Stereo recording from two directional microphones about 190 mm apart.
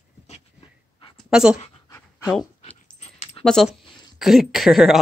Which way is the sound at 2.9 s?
35° left (ahead or behind).